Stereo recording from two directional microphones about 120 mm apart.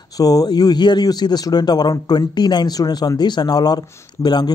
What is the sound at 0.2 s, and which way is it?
Speech, 30° left (ahead or behind).